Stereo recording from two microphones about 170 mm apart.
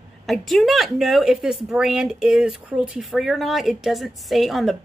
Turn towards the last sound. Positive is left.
turn(degrees=0)  # may be behind; listen again after turning